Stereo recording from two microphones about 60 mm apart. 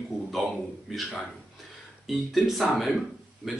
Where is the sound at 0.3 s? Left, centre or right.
Centre.